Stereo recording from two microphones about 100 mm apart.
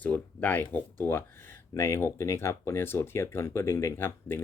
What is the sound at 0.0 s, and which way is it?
Speech, 15° left (ahead or behind).